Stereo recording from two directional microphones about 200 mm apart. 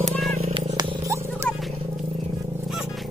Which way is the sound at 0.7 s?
20° right (ahead or behind).